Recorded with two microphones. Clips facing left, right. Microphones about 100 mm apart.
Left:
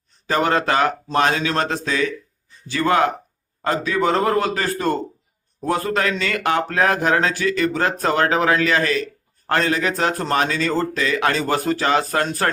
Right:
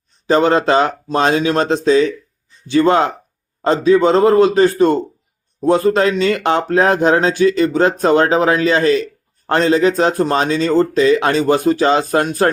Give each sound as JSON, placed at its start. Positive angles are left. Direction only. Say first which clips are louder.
{"t": 0.3, "sound": "speech", "louder": "right 6 dB", "side_deg": -25}